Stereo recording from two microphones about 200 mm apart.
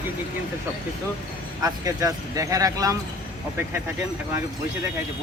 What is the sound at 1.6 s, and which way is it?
Speech, 15° right (ahead or behind).